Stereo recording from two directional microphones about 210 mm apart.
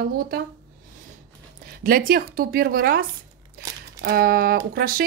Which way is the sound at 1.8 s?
45° right (ahead or behind).